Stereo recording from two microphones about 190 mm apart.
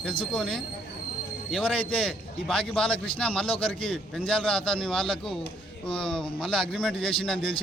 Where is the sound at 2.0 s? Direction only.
Centre (ahead or behind).